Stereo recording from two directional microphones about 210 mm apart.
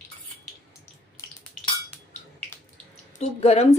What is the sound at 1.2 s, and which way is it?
Drip, 15° left (ahead or behind).